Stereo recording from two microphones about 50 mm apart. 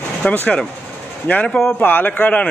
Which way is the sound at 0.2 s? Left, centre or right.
Centre.